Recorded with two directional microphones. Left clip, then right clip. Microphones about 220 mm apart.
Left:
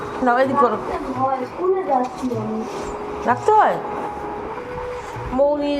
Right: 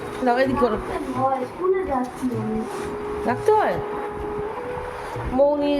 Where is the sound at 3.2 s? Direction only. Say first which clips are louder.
Left 4 dB; 15° right (ahead or behind).